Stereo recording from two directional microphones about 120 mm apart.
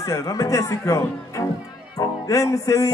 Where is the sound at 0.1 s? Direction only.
25° left (ahead or behind).